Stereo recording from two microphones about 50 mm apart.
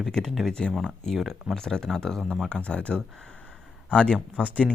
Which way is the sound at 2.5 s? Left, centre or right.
Left.